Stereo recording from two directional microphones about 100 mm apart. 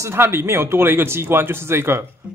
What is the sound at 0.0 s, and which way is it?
Speech, 25° right (ahead or behind).